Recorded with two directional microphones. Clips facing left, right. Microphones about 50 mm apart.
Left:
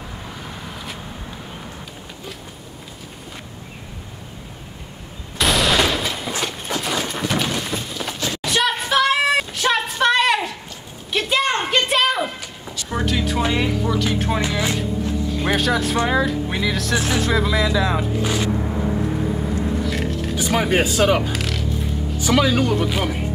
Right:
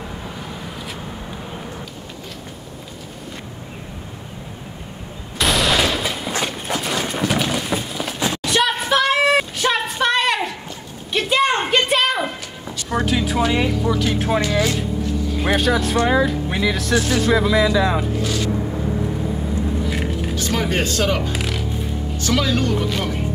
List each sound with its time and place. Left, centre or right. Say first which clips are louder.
5.4 s fusillade: even; centre
6.4 s a sound: right 1 dB; centre
13.5 s speech: right 2 dB; centre
18.2 s vehicle: left 1 dB; left
19.9 s a sound: even; centre
20.3 s speech: left 3 dB; centre
21.3 s music: right 1 dB; centre
22.2 s speech: left 2 dB; centre